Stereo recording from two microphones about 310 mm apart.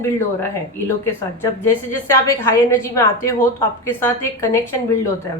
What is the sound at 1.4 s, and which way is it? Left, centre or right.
A woman's voice, centre.